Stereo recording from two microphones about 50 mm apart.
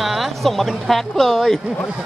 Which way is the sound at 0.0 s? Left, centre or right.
Centre.